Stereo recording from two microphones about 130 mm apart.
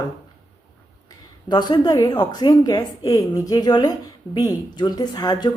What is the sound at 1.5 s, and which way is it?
A woman's voice, 35° left (ahead or behind).